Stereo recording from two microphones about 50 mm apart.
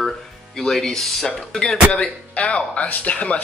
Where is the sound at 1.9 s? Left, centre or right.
Left.